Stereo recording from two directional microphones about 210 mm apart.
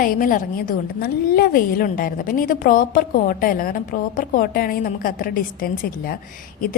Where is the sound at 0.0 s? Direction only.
40° left (ahead or behind).